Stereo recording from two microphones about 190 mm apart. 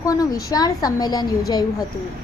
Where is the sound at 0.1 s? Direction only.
20° left (ahead or behind).